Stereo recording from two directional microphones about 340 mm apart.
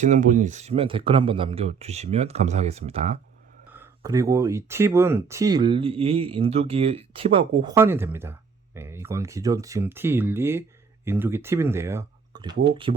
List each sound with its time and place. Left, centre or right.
0.0 s speech: right
3.7 s speech: centre